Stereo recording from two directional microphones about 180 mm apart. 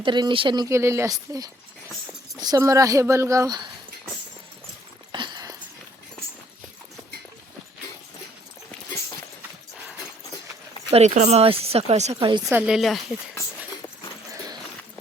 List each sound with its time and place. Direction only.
0.0 s speech: 25° right (ahead or behind)
5.1 s a sound: 25° right (ahead or behind)
10.9 s speech: 40° right (ahead or behind)
12.5 s speech: 5° right (ahead or behind)